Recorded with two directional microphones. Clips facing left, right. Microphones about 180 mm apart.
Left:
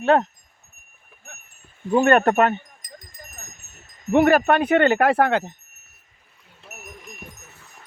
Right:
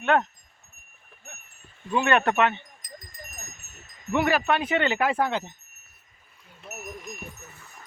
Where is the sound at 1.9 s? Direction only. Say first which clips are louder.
Left 6 dB; 45° left (ahead or behind).